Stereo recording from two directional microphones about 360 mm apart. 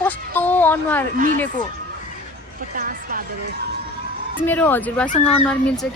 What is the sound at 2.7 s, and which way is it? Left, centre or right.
Speech, right.